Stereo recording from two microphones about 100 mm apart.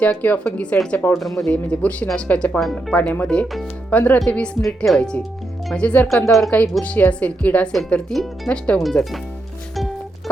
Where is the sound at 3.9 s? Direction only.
15° left (ahead or behind).